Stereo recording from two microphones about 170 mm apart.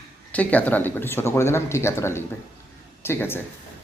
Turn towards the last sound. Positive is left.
turn(degrees=15)  # may be behind; listen again after turning